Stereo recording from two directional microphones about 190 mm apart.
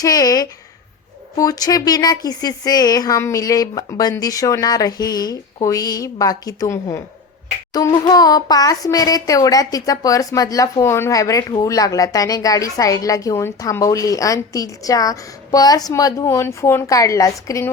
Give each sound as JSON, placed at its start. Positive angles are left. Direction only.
{"t": 0.0, "sound": "a woman's voice", "side_deg": 20}